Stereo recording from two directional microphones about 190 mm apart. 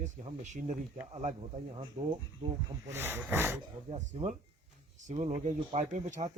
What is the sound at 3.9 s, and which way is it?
A man's voice, 35° right (ahead or behind).